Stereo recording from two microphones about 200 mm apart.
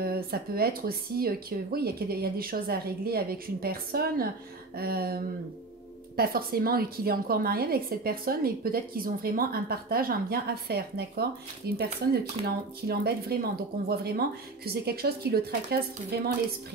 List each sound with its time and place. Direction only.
0.0 s a woman's voice: 50° right (ahead or behind)